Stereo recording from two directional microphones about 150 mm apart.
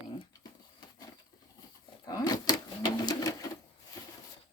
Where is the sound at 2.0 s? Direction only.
25° left (ahead or behind).